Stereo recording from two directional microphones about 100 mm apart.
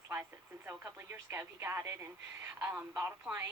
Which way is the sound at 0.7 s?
25° right (ahead or behind).